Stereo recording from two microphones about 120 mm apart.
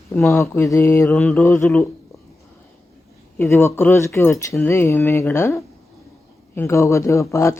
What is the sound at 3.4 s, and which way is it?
A man's voice, 20° left (ahead or behind).